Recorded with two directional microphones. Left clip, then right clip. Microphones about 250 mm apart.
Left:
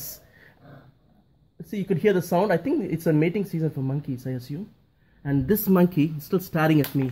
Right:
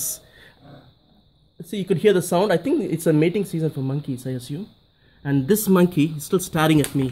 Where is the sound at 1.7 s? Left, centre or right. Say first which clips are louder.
Right 4 dB; right.